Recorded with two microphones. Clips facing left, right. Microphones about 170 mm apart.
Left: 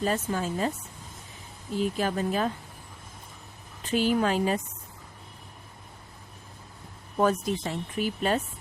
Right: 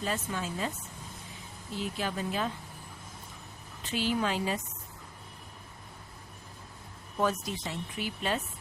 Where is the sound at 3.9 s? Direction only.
45° left (ahead or behind).